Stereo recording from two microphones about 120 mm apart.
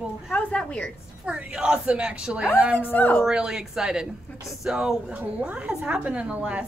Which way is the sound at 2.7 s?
15° left (ahead or behind).